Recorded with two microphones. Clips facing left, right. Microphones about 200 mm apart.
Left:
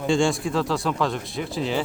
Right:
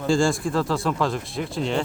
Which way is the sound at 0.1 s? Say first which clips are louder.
Right 1 dB; centre (ahead or behind).